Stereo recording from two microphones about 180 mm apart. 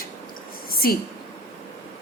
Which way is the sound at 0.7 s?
55° left (ahead or behind).